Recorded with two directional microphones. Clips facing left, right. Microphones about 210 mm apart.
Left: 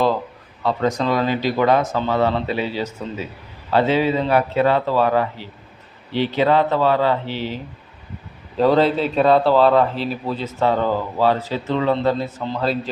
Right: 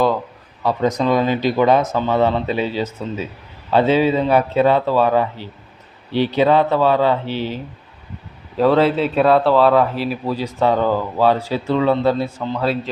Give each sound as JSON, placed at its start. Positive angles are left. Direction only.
{"t": 0.6, "sound": "a man's voice", "side_deg": -15}
{"t": 8.5, "sound": "speech", "side_deg": 0}
{"t": 10.4, "sound": "speech", "side_deg": -15}
{"t": 12.5, "sound": "speech", "side_deg": 0}